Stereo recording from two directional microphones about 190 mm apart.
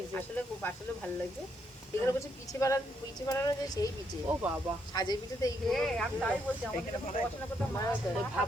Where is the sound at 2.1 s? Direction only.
15° left (ahead or behind).